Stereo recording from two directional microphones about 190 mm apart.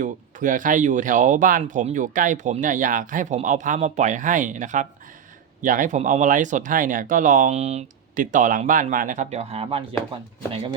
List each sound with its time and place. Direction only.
0.0 s speech: 45° right (ahead or behind)